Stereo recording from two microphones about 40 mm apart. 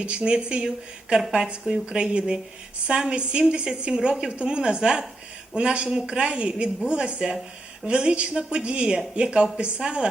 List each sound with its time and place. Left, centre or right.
0.0 s a woman's voice: right
1.6 s a woman's voice: centre